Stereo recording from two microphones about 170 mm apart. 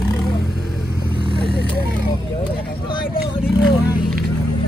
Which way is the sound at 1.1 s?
30° right (ahead or behind).